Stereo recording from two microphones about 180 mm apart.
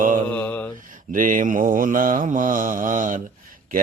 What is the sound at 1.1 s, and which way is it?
Mantra, 45° right (ahead or behind).